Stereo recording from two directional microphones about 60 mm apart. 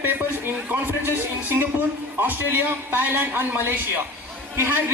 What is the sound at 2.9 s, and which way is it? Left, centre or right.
A man's voice, right.